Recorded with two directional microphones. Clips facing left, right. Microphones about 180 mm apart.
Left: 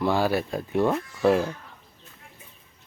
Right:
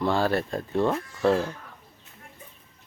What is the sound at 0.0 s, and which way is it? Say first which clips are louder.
Speech: left 1 dB; 10° left (ahead or behind).